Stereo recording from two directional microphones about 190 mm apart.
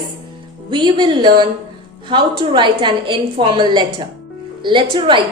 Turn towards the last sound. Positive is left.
turn(degrees=-25)  # may be behind; listen again after turning